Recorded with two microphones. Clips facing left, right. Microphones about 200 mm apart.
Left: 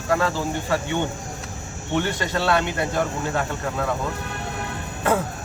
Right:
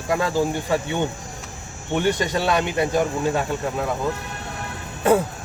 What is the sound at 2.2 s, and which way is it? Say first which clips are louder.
Speech: right 1 dB; 15° right (ahead or behind).